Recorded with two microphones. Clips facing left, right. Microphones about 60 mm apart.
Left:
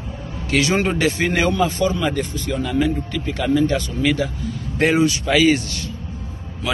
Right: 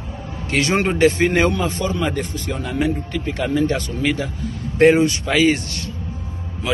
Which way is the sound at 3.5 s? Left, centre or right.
Right.